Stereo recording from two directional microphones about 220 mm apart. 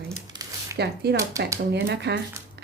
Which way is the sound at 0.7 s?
45° right (ahead or behind).